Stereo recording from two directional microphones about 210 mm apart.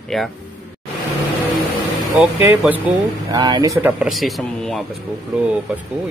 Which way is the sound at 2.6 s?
5° right (ahead or behind).